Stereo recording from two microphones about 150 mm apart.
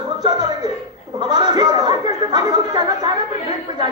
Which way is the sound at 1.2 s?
25° right (ahead or behind).